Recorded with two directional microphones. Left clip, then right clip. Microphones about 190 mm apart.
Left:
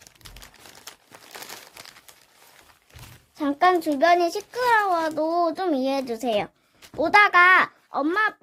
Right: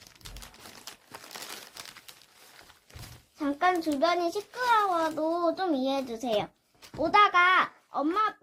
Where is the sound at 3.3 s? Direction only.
45° left (ahead or behind).